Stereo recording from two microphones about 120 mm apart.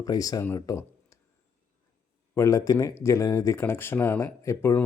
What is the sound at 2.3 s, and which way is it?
Speech, 25° left (ahead or behind).